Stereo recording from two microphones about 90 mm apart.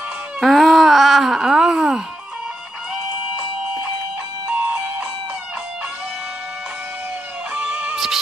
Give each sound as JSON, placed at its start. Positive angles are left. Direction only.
{"t": 0.4, "sound": "baby cry", "side_deg": 0}
{"t": 4.5, "sound": "music", "side_deg": -20}
{"t": 7.5, "sound": "music", "side_deg": -15}